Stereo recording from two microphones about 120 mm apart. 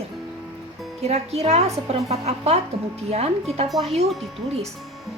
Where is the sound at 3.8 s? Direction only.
60° right (ahead or behind).